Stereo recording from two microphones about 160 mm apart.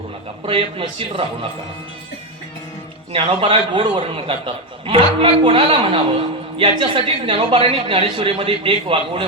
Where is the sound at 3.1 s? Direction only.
35° right (ahead or behind).